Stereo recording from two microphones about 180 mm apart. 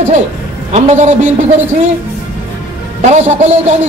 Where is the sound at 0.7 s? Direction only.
40° right (ahead or behind).